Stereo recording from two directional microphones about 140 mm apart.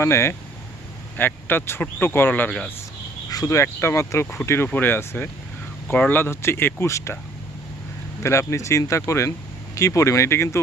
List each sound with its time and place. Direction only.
0.0 s speech: 20° left (ahead or behind)
3.2 s speech: 25° left (ahead or behind)
8.2 s speech: 20° left (ahead or behind)